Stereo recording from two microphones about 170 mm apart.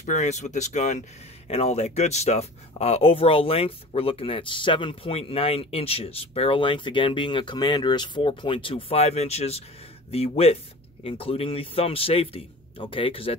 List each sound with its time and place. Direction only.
0.0 s speech: 45° left (ahead or behind)